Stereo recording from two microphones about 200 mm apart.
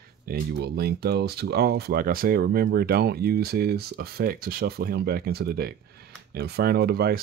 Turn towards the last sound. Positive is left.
turn(degrees=-50)  # may be behind; listen again after turning